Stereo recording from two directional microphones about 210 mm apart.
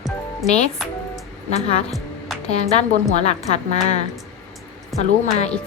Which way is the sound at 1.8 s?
Centre (ahead or behind).